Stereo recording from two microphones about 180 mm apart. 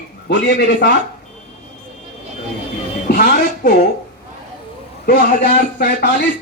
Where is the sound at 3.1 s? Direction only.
55° left (ahead or behind).